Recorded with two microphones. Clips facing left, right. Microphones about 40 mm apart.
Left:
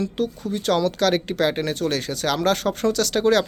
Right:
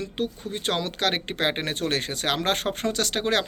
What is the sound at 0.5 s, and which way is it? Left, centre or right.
Speech, right.